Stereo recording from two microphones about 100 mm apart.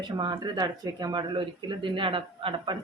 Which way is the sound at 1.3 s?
50° right (ahead or behind).